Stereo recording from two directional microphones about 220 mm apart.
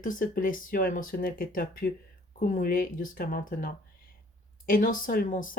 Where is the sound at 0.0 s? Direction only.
40° left (ahead or behind).